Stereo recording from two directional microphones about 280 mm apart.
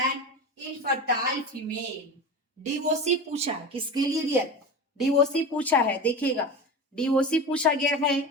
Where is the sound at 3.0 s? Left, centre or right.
Right.